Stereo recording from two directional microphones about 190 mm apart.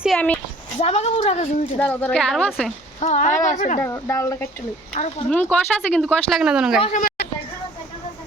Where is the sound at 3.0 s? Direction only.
40° left (ahead or behind).